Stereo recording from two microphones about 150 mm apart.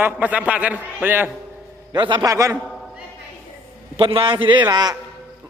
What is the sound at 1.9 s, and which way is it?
Speech, 30° right (ahead or behind).